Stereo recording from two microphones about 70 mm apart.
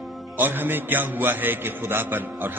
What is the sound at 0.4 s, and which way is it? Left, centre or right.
A man's voice, right.